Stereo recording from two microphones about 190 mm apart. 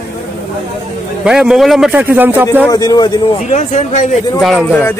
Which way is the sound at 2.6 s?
20° left (ahead or behind).